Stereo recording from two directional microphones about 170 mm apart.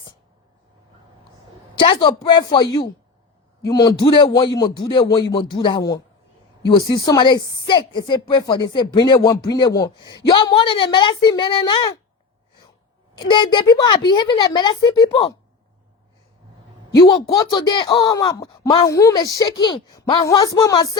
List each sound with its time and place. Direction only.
1.7 s a woman's voice: 30° left (ahead or behind)
13.1 s speech: 25° left (ahead or behind)
17.0 s speech: 25° left (ahead or behind)